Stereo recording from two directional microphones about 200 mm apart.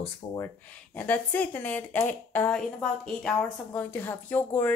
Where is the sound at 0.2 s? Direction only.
30° left (ahead or behind).